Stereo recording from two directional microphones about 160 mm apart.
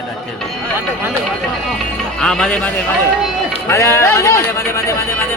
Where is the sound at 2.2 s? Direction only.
5° left (ahead or behind).